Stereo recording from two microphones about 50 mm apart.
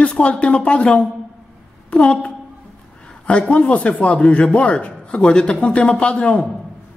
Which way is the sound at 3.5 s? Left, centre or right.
Left.